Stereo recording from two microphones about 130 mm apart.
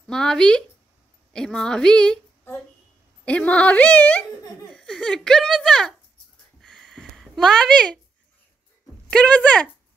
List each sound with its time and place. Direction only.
0.0 s speech: 5° left (ahead or behind)
1.3 s female singing: 5° left (ahead or behind)
3.3 s speech: 10° left (ahead or behind)
6.6 s a sound: 5° left (ahead or behind)
9.1 s speech: 10° left (ahead or behind)